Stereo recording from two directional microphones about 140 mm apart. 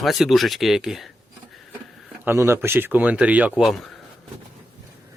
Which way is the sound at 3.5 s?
Centre (ahead or behind).